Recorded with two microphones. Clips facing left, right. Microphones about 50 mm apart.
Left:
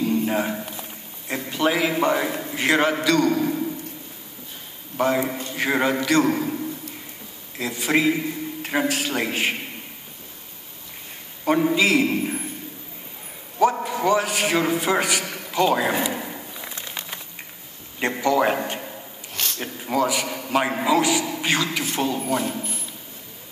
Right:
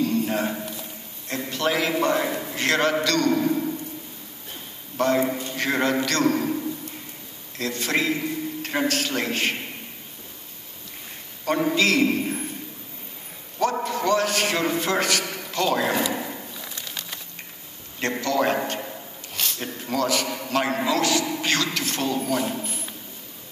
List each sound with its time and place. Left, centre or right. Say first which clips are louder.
0.0 s a sound: left 1 dB; centre
1.3 s a man's voice: left 2 dB; centre
3.3 s a man's voice: even; centre
4.9 s a man's voice: even; centre
7.5 s a man's voice: left 3 dB; centre
11.4 s a man's voice: left 2 dB; centre
13.8 s a man's voice: left 1 dB; centre
16.5 s a sound: left 2 dB; left
18.2 s a man's voice: left 3 dB; centre
19.3 s a sound: left 1 dB; centre
19.6 s a man's voice: left 3 dB; centre